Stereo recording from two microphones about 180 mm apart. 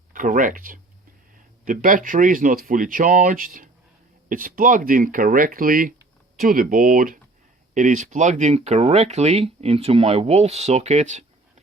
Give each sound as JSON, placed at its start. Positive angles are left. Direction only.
{"t": 0.1, "sound": "speech", "side_deg": -45}